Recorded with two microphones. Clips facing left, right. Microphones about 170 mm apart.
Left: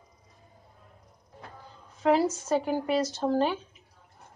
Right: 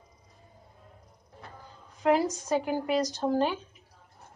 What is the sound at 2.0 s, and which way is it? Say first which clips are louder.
Speech: left 1 dB; 5° right (ahead or behind).